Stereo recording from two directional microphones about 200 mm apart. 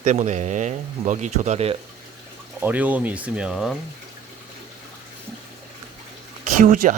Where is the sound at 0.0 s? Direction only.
35° right (ahead or behind).